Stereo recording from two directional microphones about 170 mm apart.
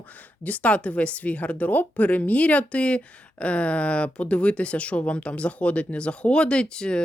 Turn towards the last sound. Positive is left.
turn(degrees=5)  # may be behind; listen again after turning